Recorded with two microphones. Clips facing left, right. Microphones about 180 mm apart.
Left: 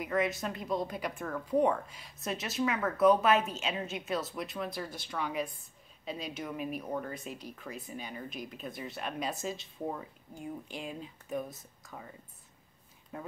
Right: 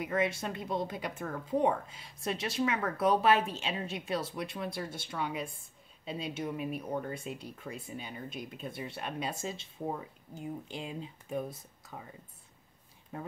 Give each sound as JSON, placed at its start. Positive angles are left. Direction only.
{"t": 0.0, "sound": "a woman's voice", "side_deg": -25}